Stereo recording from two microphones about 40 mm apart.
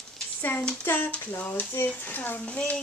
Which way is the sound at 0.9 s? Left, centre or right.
Left.